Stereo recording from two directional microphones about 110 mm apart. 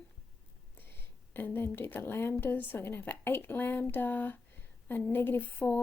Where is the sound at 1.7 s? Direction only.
20° left (ahead or behind).